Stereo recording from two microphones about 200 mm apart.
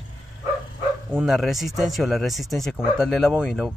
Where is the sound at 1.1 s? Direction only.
Centre (ahead or behind).